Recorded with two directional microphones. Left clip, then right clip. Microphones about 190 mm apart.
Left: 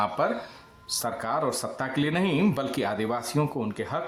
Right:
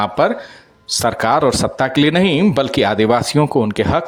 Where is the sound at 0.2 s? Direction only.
40° right (ahead or behind).